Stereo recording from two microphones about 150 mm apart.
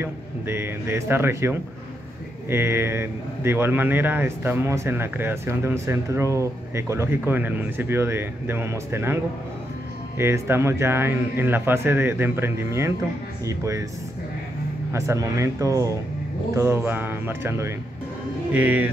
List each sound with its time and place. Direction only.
0.0 s a man's voice: 15° right (ahead or behind)
14.9 s a man's voice: 20° right (ahead or behind)